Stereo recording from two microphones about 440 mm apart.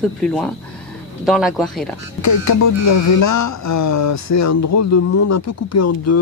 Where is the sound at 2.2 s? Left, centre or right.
Left.